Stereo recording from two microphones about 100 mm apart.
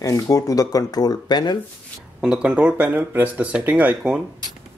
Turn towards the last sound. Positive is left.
turn(degrees=-10)  # may be behind; listen again after turning